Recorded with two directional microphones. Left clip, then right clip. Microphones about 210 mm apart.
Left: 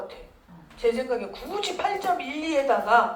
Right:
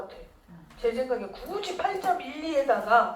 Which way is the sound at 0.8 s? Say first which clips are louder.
Left 3 dB; 25° left (ahead or behind).